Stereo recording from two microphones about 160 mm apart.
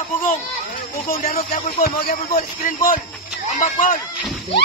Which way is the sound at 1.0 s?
60° left (ahead or behind).